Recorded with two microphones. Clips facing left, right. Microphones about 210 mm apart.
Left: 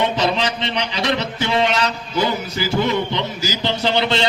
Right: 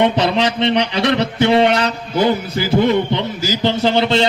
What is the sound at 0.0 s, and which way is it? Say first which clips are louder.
Music: right 4 dB; 60° right (ahead or behind).